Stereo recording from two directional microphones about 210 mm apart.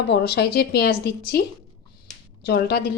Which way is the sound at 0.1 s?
50° left (ahead or behind).